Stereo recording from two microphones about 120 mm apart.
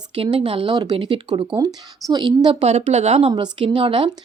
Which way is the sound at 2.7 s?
60° right (ahead or behind).